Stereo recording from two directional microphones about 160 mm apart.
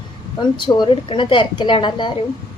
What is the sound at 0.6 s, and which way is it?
A woman's voice, 30° left (ahead or behind).